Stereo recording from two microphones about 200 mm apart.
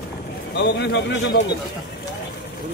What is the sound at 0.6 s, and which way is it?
Speech, 60° left (ahead or behind).